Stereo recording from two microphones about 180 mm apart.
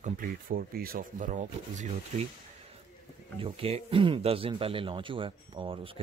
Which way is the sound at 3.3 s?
30° right (ahead or behind).